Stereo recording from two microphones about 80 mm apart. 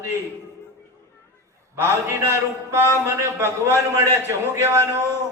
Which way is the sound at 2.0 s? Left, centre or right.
Right.